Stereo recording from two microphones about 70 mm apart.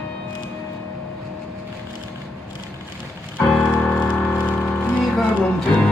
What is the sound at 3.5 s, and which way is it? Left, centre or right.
Music, centre.